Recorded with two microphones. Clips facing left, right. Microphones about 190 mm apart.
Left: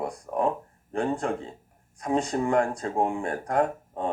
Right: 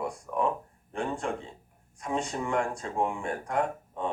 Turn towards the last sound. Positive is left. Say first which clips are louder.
# left 4 dB
turn(degrees=40)  # may be behind; listen again after turning